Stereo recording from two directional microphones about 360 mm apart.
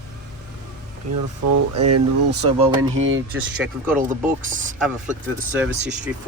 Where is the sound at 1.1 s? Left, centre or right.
Right.